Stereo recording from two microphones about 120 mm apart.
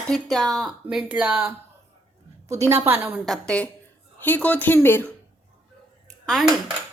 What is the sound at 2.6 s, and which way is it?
Speech, 25° right (ahead or behind).